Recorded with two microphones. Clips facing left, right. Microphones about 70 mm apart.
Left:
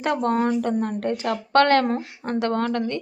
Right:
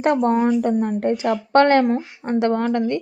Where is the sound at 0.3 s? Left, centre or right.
Centre.